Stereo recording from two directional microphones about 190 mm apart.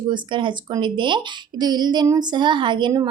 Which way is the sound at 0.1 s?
25° right (ahead or behind).